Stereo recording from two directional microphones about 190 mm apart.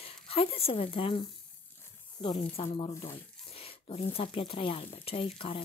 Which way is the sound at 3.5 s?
30° left (ahead or behind).